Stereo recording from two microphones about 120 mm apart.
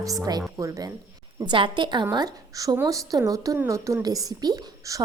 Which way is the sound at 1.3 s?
45° right (ahead or behind).